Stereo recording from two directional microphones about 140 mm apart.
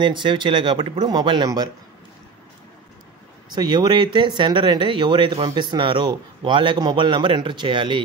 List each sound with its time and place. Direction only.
0.0 s speech: 35° right (ahead or behind)
3.5 s speech: 30° right (ahead or behind)